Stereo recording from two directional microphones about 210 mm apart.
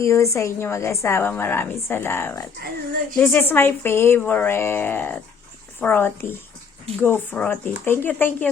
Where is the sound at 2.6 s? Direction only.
40° right (ahead or behind).